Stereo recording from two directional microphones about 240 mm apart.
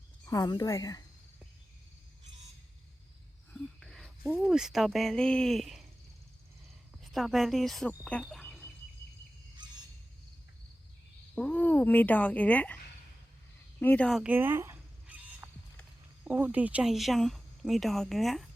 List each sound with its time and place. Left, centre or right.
0.3 s speech: centre
3.5 s a sound: centre
4.2 s speech: centre
7.0 s speech: centre
9.6 s fowl: centre
11.3 s speech: centre
13.7 s goose: centre
15.8 s speech: centre